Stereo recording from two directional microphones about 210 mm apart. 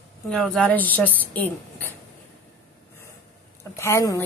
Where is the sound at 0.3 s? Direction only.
5° left (ahead or behind).